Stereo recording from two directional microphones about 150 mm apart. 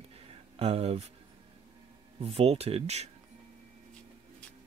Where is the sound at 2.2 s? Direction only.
40° right (ahead or behind).